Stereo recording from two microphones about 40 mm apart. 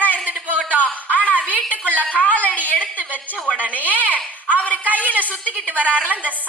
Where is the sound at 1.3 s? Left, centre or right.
Right.